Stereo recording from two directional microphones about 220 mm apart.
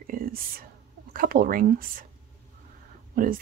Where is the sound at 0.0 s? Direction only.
40° right (ahead or behind).